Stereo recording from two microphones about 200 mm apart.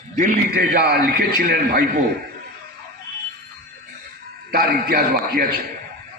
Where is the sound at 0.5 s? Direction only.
50° right (ahead or behind).